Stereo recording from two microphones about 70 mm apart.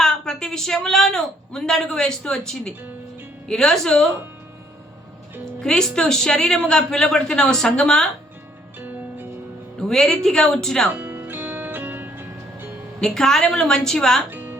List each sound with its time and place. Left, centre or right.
0.0 s a woman's voice: centre
5.5 s a woman's voice: centre
8.8 s music: right
9.9 s a woman's voice: centre
10.9 s music: right
13.0 s a woman's voice: centre
14.3 s music: right